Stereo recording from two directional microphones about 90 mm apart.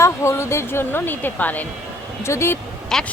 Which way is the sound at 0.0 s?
30° left (ahead or behind).